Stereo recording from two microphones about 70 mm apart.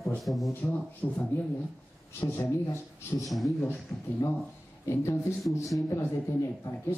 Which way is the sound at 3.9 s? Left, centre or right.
Left.